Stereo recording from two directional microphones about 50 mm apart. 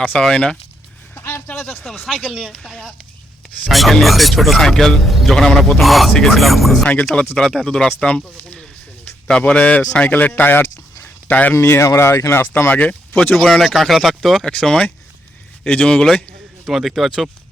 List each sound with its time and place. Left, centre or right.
0.2 s a man's voice: centre
1.1 s a sound: left
1.5 s speech: centre
2.0 s speech: left
2.3 s a man's voice: centre
5.8 s speech: centre
7.3 s a man's voice: centre
9.2 s speech: left
11.0 s a sound: left
11.5 s speech: left
12.7 s speech: left
13.3 s speech: centre
14.5 s a man's voice: centre
16.6 s speech: centre